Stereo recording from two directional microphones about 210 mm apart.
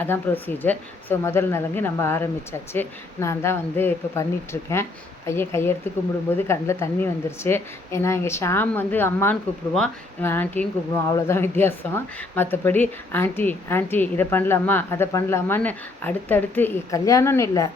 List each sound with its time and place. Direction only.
0.0 s a woman's voice: 10° left (ahead or behind)